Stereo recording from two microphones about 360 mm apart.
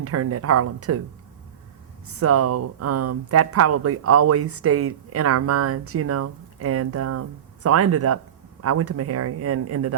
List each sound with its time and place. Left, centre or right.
0.0 s speech: right
2.1 s speech: right